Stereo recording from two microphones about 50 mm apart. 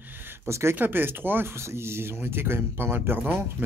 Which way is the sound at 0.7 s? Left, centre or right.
Right.